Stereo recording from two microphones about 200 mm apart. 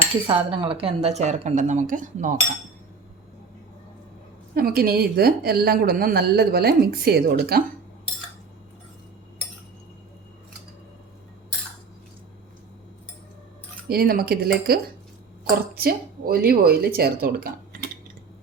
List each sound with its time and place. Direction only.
0.3 s speech: 25° right (ahead or behind)
4.5 s a woman's voice: 50° right (ahead or behind)
13.8 s a woman's voice: 50° right (ahead or behind)